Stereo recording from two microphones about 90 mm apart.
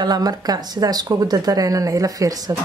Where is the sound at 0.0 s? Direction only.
50° right (ahead or behind).